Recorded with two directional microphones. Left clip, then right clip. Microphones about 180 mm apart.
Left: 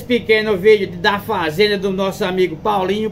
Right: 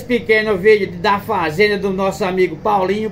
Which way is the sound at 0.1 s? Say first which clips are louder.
Even; centre (ahead or behind).